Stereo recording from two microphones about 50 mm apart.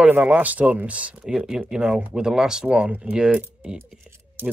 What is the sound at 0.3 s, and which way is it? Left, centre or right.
Speech, right.